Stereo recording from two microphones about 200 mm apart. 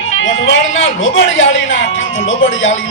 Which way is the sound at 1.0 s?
70° left (ahead or behind).